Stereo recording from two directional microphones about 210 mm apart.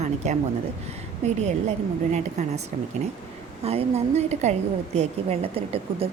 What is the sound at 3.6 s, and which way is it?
A woman's voice, 30° right (ahead or behind).